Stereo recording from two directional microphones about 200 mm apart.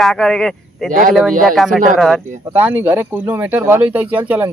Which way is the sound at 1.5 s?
Centre (ahead or behind).